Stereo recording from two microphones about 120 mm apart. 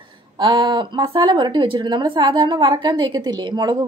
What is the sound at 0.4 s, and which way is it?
A woman's voice, 35° right (ahead or behind).